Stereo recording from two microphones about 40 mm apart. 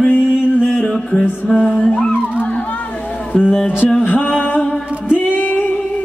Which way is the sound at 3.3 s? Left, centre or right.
Left.